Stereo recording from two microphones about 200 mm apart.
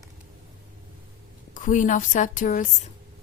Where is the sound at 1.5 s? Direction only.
40° left (ahead or behind).